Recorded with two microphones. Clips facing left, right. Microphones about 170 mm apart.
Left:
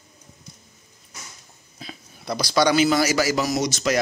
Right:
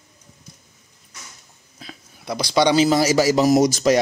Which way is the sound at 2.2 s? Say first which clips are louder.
Right 2 dB; 15° right (ahead or behind).